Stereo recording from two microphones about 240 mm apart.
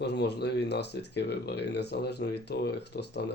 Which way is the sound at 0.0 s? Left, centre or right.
Left.